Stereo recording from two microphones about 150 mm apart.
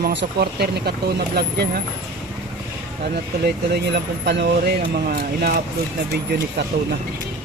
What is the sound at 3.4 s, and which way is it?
Speech, 90° right.